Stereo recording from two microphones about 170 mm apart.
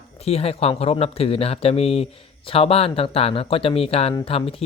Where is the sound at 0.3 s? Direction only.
35° left (ahead or behind).